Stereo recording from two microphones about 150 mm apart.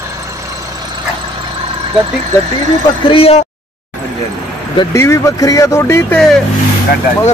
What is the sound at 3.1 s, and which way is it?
Speech, 40° left (ahead or behind).